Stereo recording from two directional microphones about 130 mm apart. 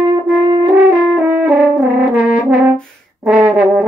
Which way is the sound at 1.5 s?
Centre (ahead or behind).